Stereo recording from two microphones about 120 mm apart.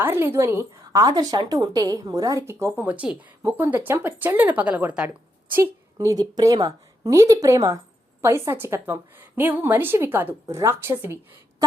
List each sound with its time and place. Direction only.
0.0 s a woman's voice: 20° right (ahead or behind)
2.8 s speech: 10° right (ahead or behind)
5.5 s a woman's voice: 25° right (ahead or behind)